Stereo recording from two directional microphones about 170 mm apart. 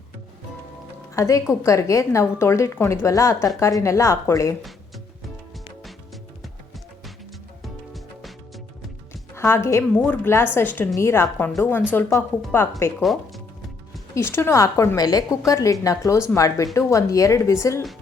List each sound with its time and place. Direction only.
1.1 s a woman's voice: 20° left (ahead or behind)
7.6 s music: centre (ahead or behind)
9.3 s a woman's voice: 15° left (ahead or behind)
13.0 s speech: centre (ahead or behind)
14.2 s a woman's voice: 15° left (ahead or behind)